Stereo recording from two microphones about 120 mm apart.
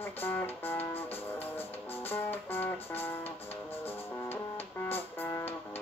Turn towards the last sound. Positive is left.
turn(degrees=15)  # may be behind; listen again after turning